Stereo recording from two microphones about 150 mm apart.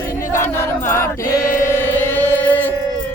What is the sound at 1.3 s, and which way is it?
Chant, 70° left (ahead or behind).